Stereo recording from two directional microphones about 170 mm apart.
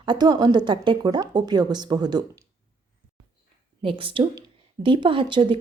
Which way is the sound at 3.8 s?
30° right (ahead or behind).